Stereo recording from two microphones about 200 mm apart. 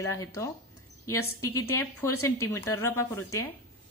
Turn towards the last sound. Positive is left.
turn(degrees=15)  # may be behind; listen again after turning